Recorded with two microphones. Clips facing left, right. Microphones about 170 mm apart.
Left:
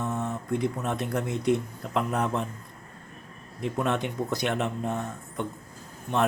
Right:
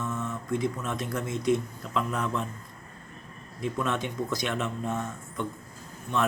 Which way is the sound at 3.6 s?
60° left (ahead or behind).